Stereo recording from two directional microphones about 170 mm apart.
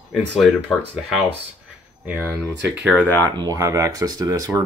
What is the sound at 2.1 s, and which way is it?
Speech, 10° right (ahead or behind).